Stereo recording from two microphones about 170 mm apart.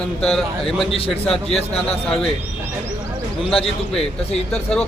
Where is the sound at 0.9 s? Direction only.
35° left (ahead or behind).